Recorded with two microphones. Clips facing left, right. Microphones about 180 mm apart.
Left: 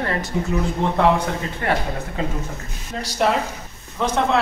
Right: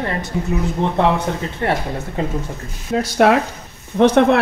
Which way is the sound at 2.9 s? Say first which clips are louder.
Right 7 dB; 65° right (ahead or behind).